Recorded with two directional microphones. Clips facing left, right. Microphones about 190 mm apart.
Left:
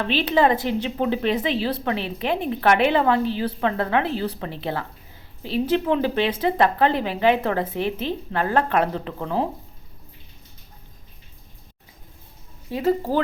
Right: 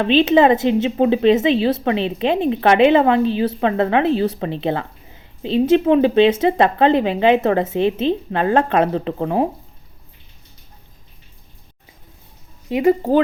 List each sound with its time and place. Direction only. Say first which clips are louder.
0.0 s speech: right 7 dB; 20° right (ahead or behind)
12.6 s speech: right 6 dB; 20° right (ahead or behind)